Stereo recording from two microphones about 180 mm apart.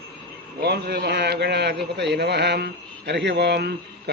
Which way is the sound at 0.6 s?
65° right (ahead or behind).